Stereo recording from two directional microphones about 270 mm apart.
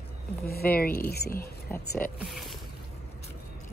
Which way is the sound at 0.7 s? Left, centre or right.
Left.